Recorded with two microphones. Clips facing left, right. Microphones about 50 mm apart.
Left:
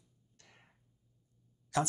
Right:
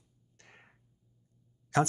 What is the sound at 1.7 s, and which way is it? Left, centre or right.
Speech, right.